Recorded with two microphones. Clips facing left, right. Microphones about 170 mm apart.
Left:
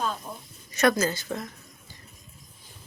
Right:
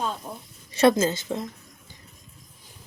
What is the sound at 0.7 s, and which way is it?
Speech, 25° right (ahead or behind).